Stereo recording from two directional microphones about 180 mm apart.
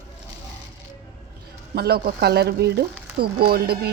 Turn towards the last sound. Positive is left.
turn(degrees=-60)  # may be behind; listen again after turning